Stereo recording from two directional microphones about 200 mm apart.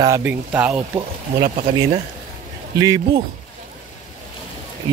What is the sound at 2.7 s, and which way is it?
Speech, 15° right (ahead or behind).